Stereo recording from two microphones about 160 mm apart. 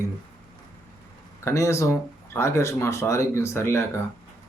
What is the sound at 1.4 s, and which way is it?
Speech, 20° left (ahead or behind).